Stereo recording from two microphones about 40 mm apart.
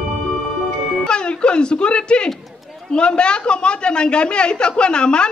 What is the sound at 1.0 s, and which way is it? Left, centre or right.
Music, left.